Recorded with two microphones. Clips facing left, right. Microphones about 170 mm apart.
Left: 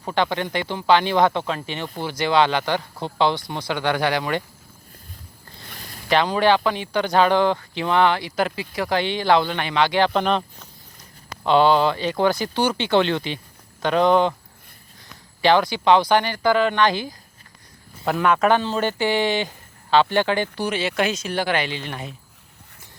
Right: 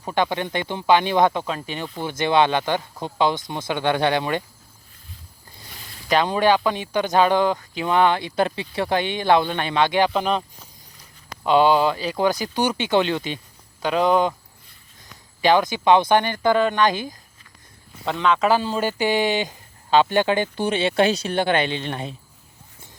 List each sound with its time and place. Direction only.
0.1 s speech: 15° right (ahead or behind)
5.6 s zipper: 50° left (ahead or behind)
6.2 s speech: 20° right (ahead or behind)
10.1 s speech: 5° right (ahead or behind)
15.4 s speech: 15° right (ahead or behind)
18.0 s speech: 5° left (ahead or behind)
18.5 s speech: 10° right (ahead or behind); by 22.1 s 25° right (ahead or behind)